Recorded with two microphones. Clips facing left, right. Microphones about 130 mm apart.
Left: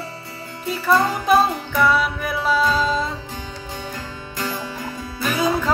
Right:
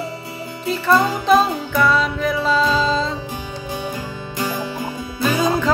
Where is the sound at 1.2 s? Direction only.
10° left (ahead or behind).